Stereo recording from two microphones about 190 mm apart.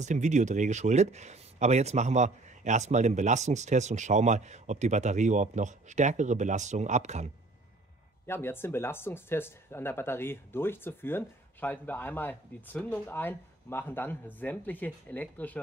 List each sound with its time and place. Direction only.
0.0 s speech: 40° right (ahead or behind)
8.3 s speech: 10° left (ahead or behind)